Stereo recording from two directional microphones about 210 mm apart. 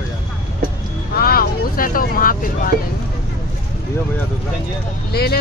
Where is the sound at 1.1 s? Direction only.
45° left (ahead or behind).